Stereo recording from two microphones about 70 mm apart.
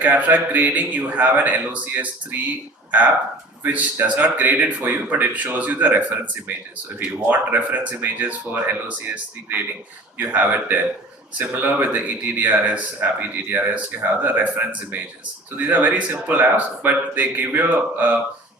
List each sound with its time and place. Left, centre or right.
0.0 s speech: right
3.7 s speech: right